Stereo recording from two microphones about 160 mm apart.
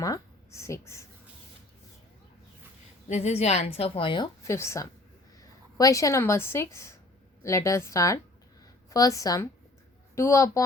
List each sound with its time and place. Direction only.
0.0 s a woman's voice: 20° left (ahead or behind)
3.1 s a woman's voice: 45° left (ahead or behind)
4.4 s a woman's voice: 15° left (ahead or behind)